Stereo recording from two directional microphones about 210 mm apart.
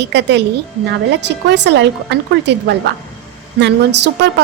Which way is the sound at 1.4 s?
55° right (ahead or behind).